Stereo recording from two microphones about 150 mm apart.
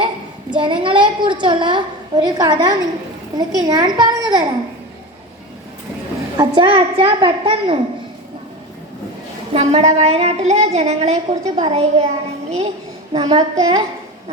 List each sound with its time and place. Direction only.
0.5 s a woman's voice: 35° right (ahead or behind)
6.3 s a woman's voice: 20° right (ahead or behind)
6.6 s a woman's voice: 35° right (ahead or behind)
9.5 s a woman's voice: 40° right (ahead or behind)
11.5 s a woman's voice: 40° right (ahead or behind)
13.1 s a woman's voice: 30° right (ahead or behind)